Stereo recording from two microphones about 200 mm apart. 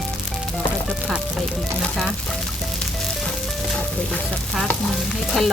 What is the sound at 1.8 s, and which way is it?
Stir, centre (ahead or behind).